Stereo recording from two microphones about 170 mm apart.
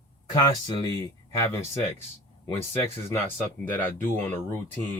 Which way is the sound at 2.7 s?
15° left (ahead or behind).